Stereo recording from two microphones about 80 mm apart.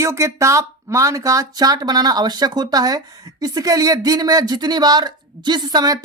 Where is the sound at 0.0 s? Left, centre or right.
Right.